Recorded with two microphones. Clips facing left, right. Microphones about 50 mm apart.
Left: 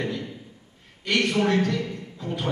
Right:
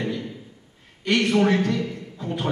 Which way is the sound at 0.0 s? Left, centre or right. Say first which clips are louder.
Right 1 dB; centre.